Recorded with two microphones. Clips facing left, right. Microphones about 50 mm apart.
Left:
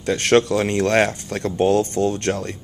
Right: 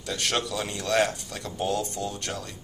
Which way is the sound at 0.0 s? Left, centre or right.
Left.